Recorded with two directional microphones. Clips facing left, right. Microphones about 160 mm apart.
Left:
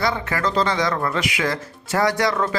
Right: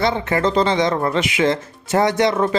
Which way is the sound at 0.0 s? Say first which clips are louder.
Right 4 dB; 25° right (ahead or behind).